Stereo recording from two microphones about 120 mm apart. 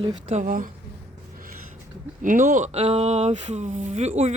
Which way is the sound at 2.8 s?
55° right (ahead or behind).